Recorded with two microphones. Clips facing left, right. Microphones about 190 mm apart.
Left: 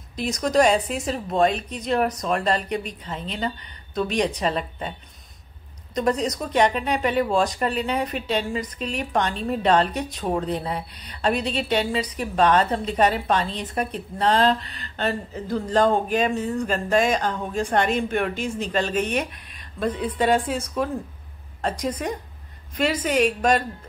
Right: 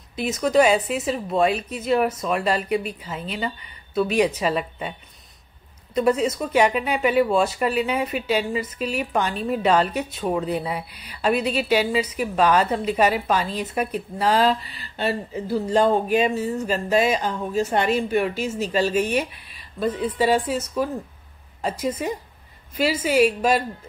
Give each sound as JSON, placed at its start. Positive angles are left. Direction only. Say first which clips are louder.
{"t": 0.1, "sound": "a woman's voice", "louder": "right 2 dB", "side_deg": -5}
{"t": 5.9, "sound": "a woman's voice", "louder": "right 3 dB", "side_deg": -5}